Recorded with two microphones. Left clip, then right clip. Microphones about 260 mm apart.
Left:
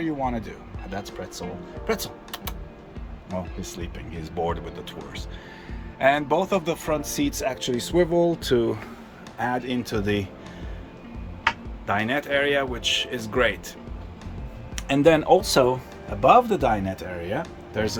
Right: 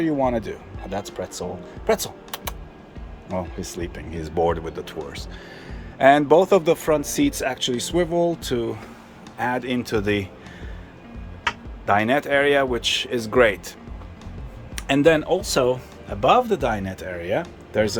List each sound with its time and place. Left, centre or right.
0.0 s speech: right
3.6 s speech: centre
6.0 s speech: right
11.9 s speech: centre
14.8 s speech: centre